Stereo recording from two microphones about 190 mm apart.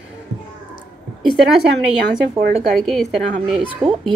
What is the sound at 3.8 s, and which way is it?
Speech, 20° right (ahead or behind).